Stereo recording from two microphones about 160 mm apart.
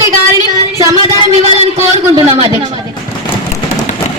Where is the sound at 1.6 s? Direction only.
40° right (ahead or behind).